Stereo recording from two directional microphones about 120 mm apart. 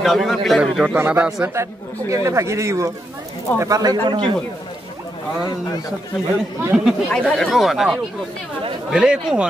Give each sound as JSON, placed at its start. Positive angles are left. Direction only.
{"t": 0.0, "sound": "speech", "side_deg": 0}
{"t": 1.5, "sound": "speech", "side_deg": -25}
{"t": 6.7, "sound": "speech", "side_deg": -5}
{"t": 7.1, "sound": "speech", "side_deg": 5}